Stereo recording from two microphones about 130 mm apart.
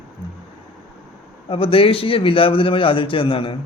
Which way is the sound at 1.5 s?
45° left (ahead or behind).